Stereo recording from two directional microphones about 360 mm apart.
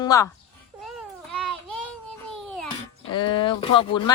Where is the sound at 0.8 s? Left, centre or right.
Centre.